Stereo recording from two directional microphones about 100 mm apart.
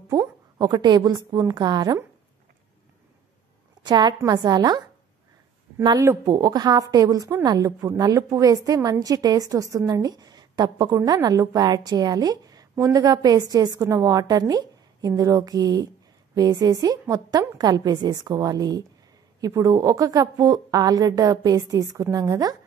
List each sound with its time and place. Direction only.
0.1 s a woman's voice: 45° right (ahead or behind)
3.8 s a woman's voice: 45° right (ahead or behind)
5.9 s a woman's voice: 35° right (ahead or behind)